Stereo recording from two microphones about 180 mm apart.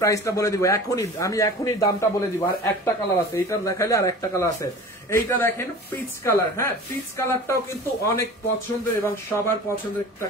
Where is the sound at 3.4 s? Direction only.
15° left (ahead or behind).